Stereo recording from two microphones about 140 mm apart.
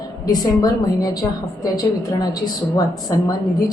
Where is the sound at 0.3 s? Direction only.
30° left (ahead or behind).